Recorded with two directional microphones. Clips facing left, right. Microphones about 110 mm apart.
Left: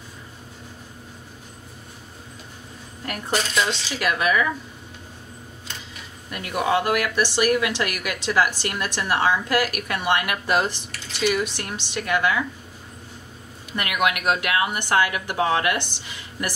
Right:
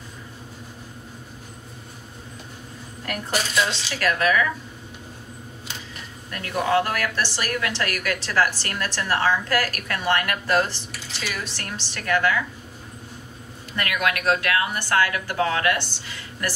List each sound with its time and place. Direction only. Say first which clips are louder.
3.3 s speech: left 1 dB; 5° right (ahead or behind)
4.0 s a woman's voice: right 1 dB; 15° left (ahead or behind)
6.3 s a woman's voice: right 1 dB; 15° left (ahead or behind)
13.7 s a woman's voice: left 1 dB; 15° left (ahead or behind)